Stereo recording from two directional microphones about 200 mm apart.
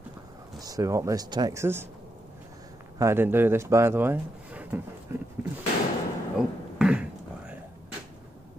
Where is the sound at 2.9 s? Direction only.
15° right (ahead or behind).